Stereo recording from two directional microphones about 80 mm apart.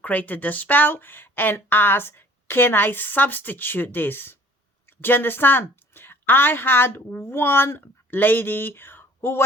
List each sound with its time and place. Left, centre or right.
0.0 s a woman's voice: centre